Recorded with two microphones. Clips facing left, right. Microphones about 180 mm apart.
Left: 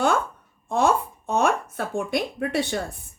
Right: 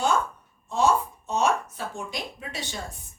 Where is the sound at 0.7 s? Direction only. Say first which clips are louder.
Left 2 dB; 55° left (ahead or behind).